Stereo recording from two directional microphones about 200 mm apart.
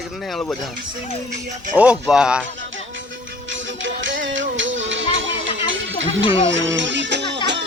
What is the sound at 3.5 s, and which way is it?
Music, 70° right (ahead or behind).